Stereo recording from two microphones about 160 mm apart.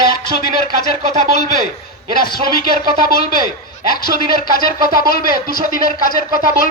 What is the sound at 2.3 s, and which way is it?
Speech, 65° left (ahead or behind).